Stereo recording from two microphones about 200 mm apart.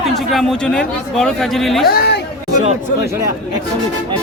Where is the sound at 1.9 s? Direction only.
55° left (ahead or behind).